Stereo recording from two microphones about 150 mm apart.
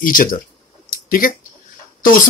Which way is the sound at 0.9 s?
65° left (ahead or behind).